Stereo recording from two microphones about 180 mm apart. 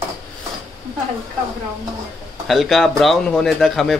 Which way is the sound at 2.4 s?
Centre (ahead or behind).